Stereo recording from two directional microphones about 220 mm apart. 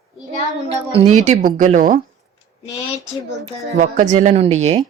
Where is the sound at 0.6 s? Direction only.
25° right (ahead or behind).